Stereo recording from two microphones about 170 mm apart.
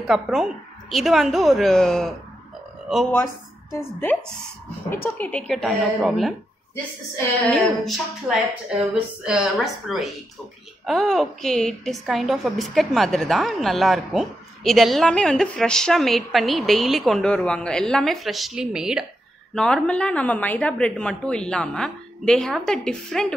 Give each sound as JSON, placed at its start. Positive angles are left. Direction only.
{"t": 0.0, "sound": "a woman's voice", "side_deg": 0}
{"t": 4.9, "sound": "a woman's voice", "side_deg": 10}
{"t": 7.4, "sound": "a woman's voice", "side_deg": 5}